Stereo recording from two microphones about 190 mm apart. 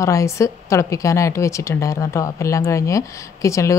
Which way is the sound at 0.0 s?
15° left (ahead or behind).